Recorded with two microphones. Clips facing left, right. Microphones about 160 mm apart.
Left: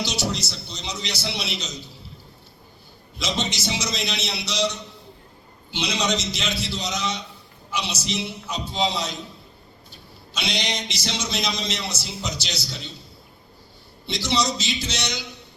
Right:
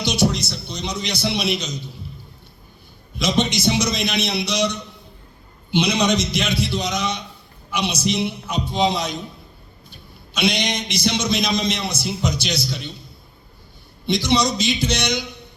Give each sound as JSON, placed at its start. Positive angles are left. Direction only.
{"t": 0.0, "sound": "a man's voice", "side_deg": -15}
{"t": 3.2, "sound": "a man's voice", "side_deg": -15}
{"t": 5.7, "sound": "a man's voice", "side_deg": -15}
{"t": 14.1, "sound": "a man's voice", "side_deg": -15}